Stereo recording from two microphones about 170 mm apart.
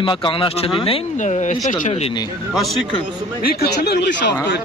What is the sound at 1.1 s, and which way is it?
Speech, 45° left (ahead or behind).